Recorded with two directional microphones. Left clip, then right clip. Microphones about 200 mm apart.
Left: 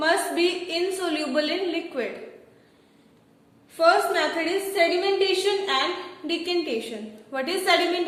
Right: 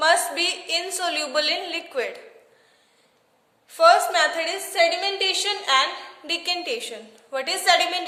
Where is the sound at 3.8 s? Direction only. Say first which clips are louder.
Right 4 dB; 50° right (ahead or behind).